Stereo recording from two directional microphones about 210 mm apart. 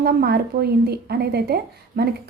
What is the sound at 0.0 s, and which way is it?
Speech, 45° right (ahead or behind).